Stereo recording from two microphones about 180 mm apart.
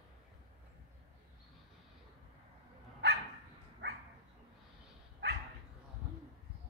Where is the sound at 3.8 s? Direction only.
75° right (ahead or behind).